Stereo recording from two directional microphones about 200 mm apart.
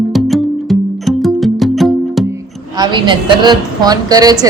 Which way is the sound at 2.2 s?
20° right (ahead or behind).